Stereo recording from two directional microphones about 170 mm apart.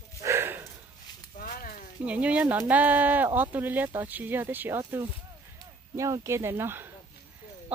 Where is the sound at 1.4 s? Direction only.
55° left (ahead or behind).